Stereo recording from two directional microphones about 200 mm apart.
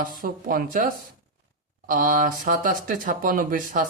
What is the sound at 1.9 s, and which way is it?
Speech, 40° right (ahead or behind).